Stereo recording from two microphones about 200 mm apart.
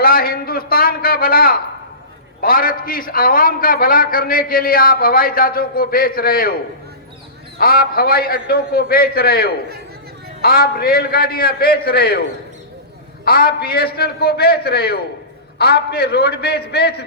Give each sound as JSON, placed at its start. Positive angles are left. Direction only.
{"t": 0.0, "sound": "a man's voice", "side_deg": 45}
{"t": 7.6, "sound": "a man's voice", "side_deg": 50}
{"t": 13.2, "sound": "a man's voice", "side_deg": 50}